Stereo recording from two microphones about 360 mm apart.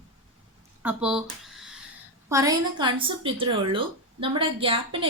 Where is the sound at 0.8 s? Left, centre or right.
Centre.